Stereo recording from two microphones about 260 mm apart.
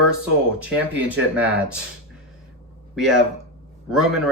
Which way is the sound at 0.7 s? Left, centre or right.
Centre.